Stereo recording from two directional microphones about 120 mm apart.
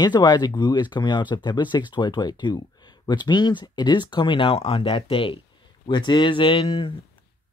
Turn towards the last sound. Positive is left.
turn(degrees=45)  # may be behind; listen again after turning